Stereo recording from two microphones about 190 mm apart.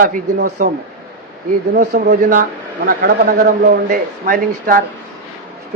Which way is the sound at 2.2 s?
40° right (ahead or behind).